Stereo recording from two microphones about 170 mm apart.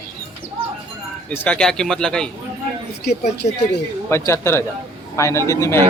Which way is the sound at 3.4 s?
40° left (ahead or behind).